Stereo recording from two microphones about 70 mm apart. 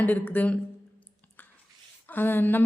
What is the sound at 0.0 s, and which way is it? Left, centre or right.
Speech, left.